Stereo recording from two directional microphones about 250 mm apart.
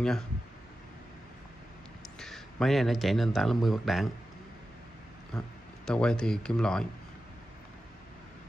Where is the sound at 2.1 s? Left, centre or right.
Centre.